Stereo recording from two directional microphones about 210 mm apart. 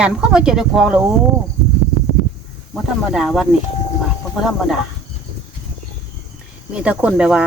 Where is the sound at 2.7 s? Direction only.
Centre (ahead or behind).